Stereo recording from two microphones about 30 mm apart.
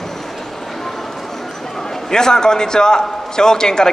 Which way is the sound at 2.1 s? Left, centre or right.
Left.